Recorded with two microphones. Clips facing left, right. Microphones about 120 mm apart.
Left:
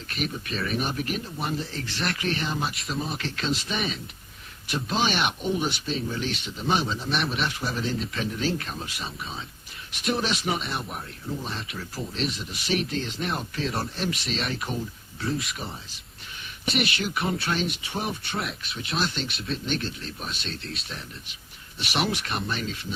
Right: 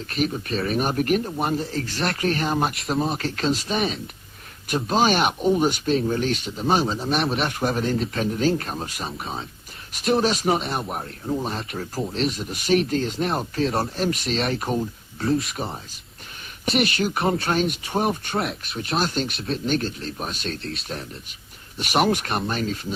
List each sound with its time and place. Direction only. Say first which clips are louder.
0.1 s speech: right 6 dB; 35° right (ahead or behind)
0.7 s speech: right 8 dB; 45° right (ahead or behind)
2.8 s speech: right 7 dB; 30° right (ahead or behind)
3.2 s speech: right 5 dB; 40° right (ahead or behind)
7.4 s speech: right 6 dB; 50° right (ahead or behind)
9.9 s speech: right 6 dB; 35° right (ahead or behind)
16.8 s speech: right 5 dB; 35° right (ahead or behind)
21.8 s speech: right 7 dB; 45° right (ahead or behind)